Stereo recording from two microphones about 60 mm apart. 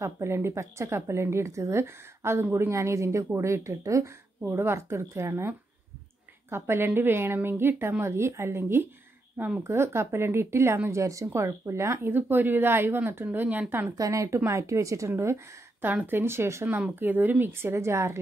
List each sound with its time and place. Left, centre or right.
0.0 s a woman's voice: right
4.5 s speech: right
6.5 s speech: right
12.1 s speech: right
13.2 s speech: right
13.9 s a woman's voice: right
15.0 s speech: right
16.9 s speech: right